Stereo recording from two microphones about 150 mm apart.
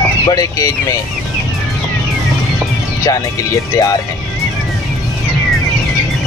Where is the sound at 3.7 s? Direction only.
25° left (ahead or behind).